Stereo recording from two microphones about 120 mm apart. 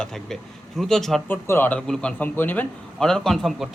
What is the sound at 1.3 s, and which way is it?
Speech, 20° left (ahead or behind).